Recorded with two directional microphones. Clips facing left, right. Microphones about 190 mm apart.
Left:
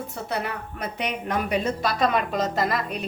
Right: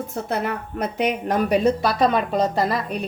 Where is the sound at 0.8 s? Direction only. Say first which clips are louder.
Right 7 dB; 45° right (ahead or behind).